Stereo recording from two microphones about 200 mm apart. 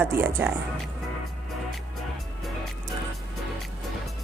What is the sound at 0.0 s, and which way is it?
Speech, 10° right (ahead or behind).